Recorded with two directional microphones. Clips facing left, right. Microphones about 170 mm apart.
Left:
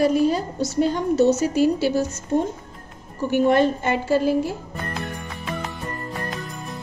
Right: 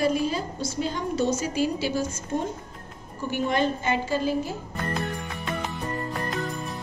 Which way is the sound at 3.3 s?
55° left (ahead or behind).